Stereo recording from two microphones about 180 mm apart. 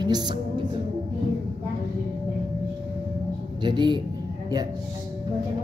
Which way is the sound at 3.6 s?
25° right (ahead or behind).